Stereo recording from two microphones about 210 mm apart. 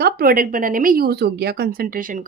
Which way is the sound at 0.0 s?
45° right (ahead or behind).